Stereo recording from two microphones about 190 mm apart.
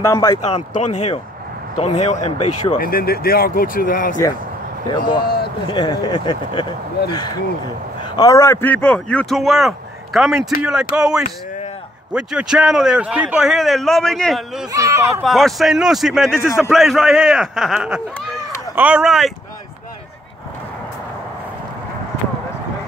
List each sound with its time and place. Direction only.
0.0 s a man's voice: 15° left (ahead or behind)
0.4 s speech: 35° left (ahead or behind)
2.8 s speech: 50° left (ahead or behind)
5.7 s a man's voice: 20° left (ahead or behind); by 14.7 s centre (ahead or behind)
14.7 s speech: 15° right (ahead or behind)
15.2 s a man's voice: centre (ahead or behind)